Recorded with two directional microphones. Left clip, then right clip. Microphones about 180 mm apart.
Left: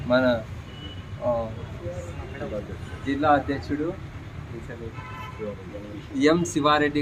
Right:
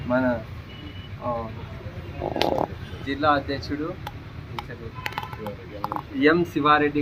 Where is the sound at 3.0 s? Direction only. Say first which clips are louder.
Left 1 dB; 45° left (ahead or behind).